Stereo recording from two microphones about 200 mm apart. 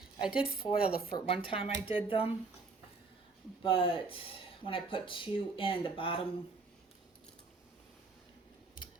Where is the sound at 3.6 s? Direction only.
25° left (ahead or behind).